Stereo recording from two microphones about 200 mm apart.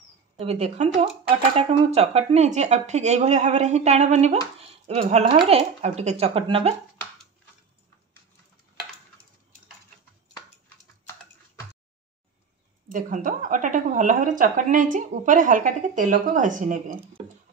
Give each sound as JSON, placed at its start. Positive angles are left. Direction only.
{"t": 0.4, "sound": "a woman's voice", "side_deg": -30}
{"t": 12.8, "sound": "a woman's voice", "side_deg": -40}